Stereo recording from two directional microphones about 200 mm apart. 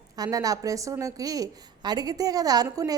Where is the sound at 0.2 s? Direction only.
15° right (ahead or behind).